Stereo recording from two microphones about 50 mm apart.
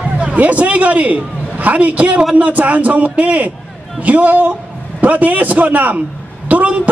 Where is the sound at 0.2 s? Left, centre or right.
Right.